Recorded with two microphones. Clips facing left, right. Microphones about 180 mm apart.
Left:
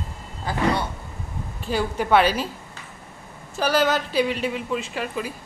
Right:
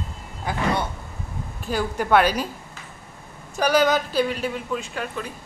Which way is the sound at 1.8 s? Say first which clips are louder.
Even; 10° left (ahead or behind).